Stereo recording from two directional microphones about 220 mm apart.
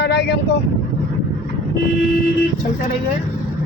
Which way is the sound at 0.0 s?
50° left (ahead or behind).